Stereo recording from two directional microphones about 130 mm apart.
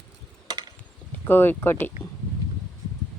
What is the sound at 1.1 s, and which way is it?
Speech, 15° left (ahead or behind).